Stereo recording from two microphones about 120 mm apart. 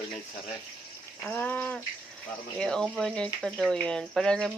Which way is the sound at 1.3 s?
15° left (ahead or behind).